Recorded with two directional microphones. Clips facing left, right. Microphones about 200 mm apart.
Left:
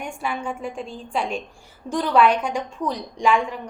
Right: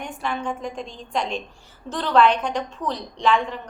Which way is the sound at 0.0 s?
10° left (ahead or behind).